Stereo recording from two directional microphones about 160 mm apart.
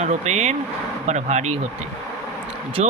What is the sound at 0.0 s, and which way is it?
Speech, 45° right (ahead or behind).